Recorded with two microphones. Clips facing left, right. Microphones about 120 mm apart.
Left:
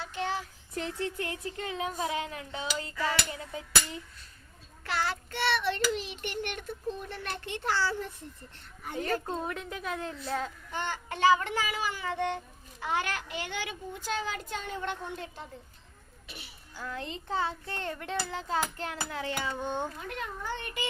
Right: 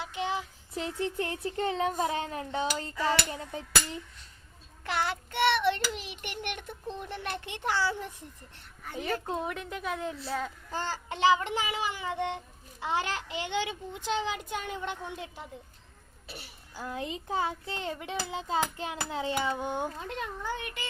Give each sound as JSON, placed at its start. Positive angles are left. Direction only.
{"t": 0.0, "sound": "child singing", "side_deg": -20}
{"t": 1.2, "sound": "a sound", "side_deg": -30}
{"t": 4.8, "sound": "a child's voice", "side_deg": -15}
{"t": 10.7, "sound": "a sound", "side_deg": -30}
{"t": 11.2, "sound": "a child's voice", "side_deg": -20}
{"t": 16.2, "sound": "speech", "side_deg": -35}
{"t": 16.7, "sound": "a child's voice", "side_deg": -15}